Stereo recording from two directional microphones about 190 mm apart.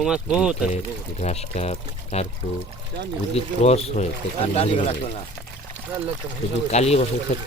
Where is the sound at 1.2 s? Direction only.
35° left (ahead or behind).